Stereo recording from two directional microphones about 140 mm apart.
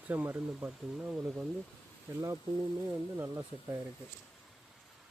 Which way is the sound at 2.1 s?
20° right (ahead or behind).